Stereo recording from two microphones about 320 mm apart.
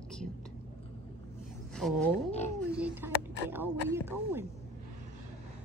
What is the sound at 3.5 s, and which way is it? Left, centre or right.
Speech, centre.